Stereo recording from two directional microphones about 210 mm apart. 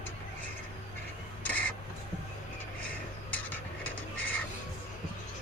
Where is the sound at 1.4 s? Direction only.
5° left (ahead or behind).